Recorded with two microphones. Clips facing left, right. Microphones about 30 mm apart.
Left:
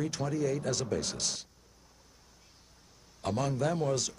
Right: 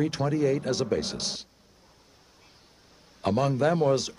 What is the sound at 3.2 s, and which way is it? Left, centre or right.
Speech, right.